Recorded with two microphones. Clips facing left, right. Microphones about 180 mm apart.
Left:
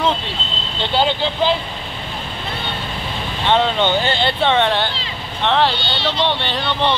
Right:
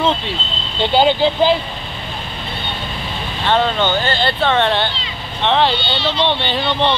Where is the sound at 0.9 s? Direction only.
10° right (ahead or behind).